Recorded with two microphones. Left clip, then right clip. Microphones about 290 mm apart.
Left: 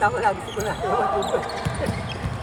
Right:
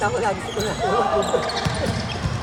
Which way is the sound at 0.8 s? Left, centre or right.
Right.